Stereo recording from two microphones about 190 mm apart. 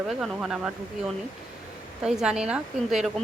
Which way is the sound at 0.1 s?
Centre (ahead or behind).